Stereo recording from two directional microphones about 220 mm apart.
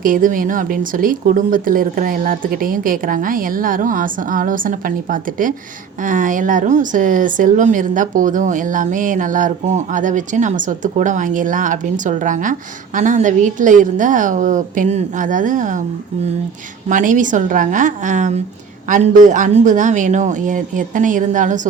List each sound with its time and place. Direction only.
0.0 s a woman's voice: 40° right (ahead or behind)
16.9 s a woman's voice: 35° right (ahead or behind)